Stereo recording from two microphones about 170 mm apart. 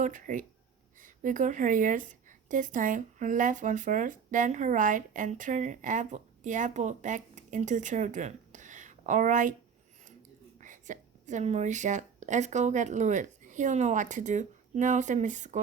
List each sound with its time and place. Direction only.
0.0 s speech: 50° right (ahead or behind)
10.6 s speech: 45° right (ahead or behind)